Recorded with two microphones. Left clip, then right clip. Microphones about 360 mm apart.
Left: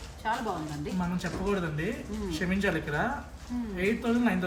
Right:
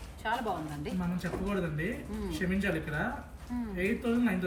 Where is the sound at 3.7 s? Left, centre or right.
Centre.